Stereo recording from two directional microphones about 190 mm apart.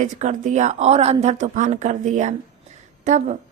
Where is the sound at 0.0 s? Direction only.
40° right (ahead or behind).